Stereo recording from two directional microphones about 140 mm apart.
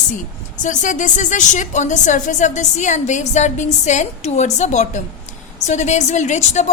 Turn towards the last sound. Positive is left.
turn(degrees=55)  # may be behind; listen again after turning